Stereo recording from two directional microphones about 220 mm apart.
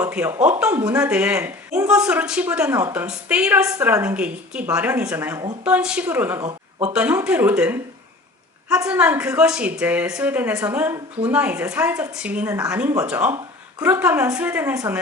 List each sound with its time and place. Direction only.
0.0 s a woman's voice: 10° right (ahead or behind)